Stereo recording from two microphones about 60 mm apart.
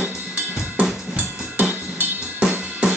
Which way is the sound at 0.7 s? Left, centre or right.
Centre.